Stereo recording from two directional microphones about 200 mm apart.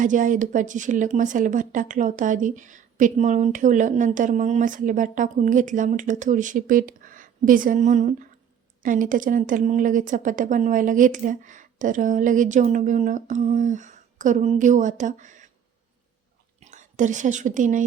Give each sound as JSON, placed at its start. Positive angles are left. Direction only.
{"t": 0.0, "sound": "speech", "side_deg": -40}
{"t": 16.6, "sound": "speech", "side_deg": -40}